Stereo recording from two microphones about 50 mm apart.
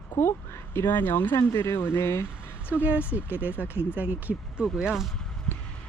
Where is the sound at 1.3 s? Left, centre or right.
Left.